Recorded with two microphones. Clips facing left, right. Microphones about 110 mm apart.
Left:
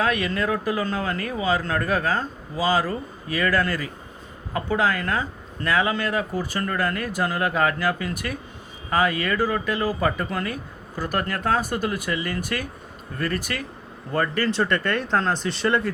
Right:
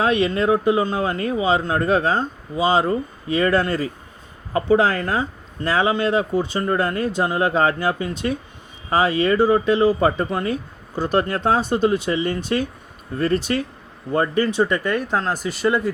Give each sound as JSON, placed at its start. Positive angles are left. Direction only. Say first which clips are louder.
{"t": 0.0, "sound": "speech", "louder": "right 5 dB", "side_deg": -25}